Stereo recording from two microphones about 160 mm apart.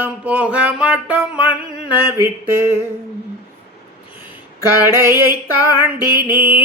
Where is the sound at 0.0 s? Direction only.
10° right (ahead or behind).